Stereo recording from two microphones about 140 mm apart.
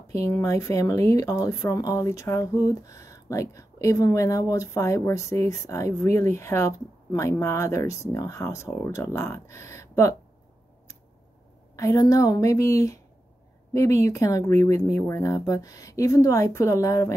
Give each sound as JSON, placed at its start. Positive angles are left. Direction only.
{"t": 0.1, "sound": "speech", "side_deg": 20}
{"t": 11.7, "sound": "speech", "side_deg": 20}
{"t": 14.0, "sound": "speech", "side_deg": 20}